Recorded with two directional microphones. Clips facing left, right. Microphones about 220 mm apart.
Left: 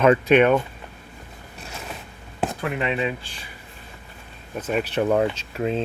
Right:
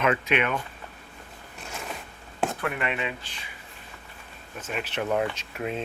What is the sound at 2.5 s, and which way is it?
Speech, 25° left (ahead or behind).